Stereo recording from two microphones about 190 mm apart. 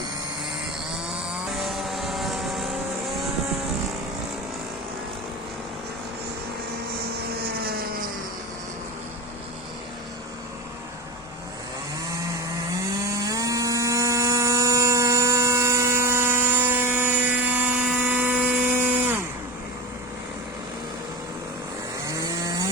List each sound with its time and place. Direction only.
1.3 s vehicle: centre (ahead or behind)
7.4 s vehicle: 55° right (ahead or behind)
13.0 s electric toothbrush: 15° right (ahead or behind)
22.0 s chainsaw: 20° right (ahead or behind)